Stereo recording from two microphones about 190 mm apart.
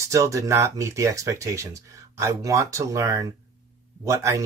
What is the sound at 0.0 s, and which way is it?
Speech, 15° right (ahead or behind).